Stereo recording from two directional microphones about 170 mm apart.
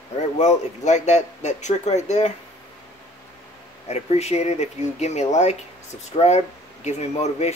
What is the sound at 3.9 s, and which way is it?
Speech, 40° left (ahead or behind).